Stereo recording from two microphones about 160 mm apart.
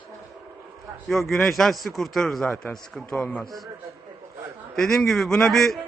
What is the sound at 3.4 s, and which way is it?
Speech, 20° right (ahead or behind).